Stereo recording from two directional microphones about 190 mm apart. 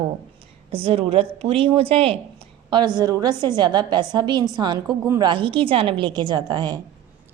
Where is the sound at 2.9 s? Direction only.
20° right (ahead or behind).